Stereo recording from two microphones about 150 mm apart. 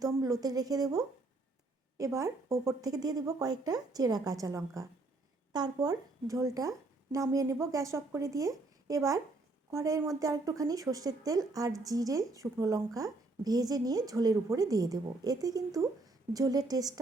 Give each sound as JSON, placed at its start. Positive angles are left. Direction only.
{"t": 0.0, "sound": "speech", "side_deg": -25}